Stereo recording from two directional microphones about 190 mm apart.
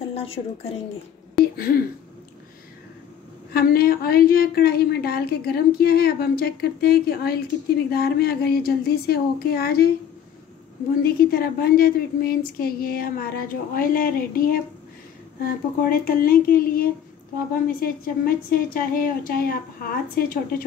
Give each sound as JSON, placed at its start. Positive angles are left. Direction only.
{"t": 0.1, "sound": "a sound", "side_deg": 30}
{"t": 1.4, "sound": "speech", "side_deg": 55}
{"t": 3.5, "sound": "a woman's voice", "side_deg": 55}
{"t": 11.0, "sound": "a woman's voice", "side_deg": 50}